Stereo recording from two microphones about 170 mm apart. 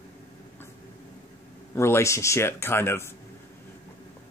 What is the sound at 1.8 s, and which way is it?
Speech, 15° left (ahead or behind).